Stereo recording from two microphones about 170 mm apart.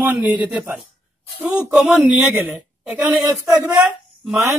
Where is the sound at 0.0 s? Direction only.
10° right (ahead or behind).